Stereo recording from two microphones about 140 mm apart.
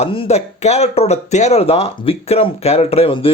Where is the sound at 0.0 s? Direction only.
45° left (ahead or behind).